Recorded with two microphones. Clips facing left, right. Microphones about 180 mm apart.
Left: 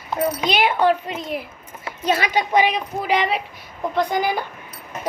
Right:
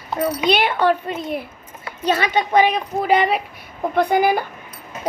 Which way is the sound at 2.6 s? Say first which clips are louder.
Right 4 dB; 50° right (ahead or behind).